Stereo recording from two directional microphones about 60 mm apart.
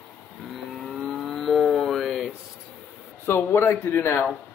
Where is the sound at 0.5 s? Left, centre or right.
Centre.